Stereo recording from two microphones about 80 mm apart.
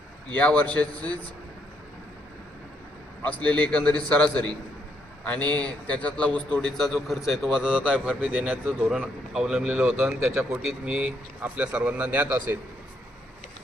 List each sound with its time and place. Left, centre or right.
0.3 s a man's voice: centre
3.2 s a man's voice: centre
9.3 s speech: centre; by 10.6 s right
10.8 s speech: centre